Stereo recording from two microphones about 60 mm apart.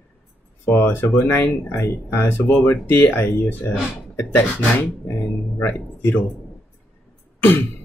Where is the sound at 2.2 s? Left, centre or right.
Left.